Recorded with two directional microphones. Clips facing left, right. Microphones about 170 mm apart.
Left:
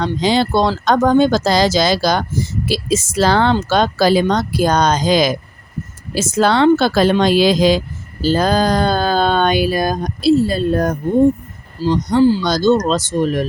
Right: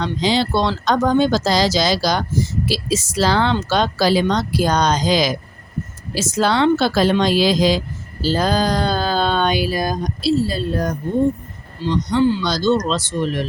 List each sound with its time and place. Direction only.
0.0 s speech: 50° left (ahead or behind)